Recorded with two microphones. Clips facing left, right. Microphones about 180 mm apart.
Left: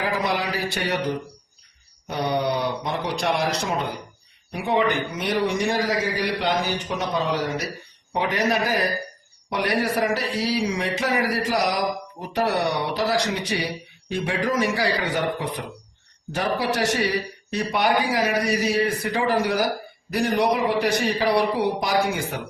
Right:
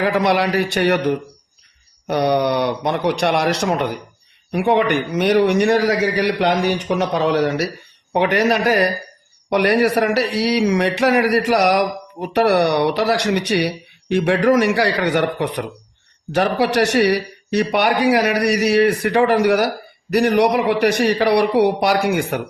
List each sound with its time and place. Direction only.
0.0 s a man's voice: 70° right (ahead or behind)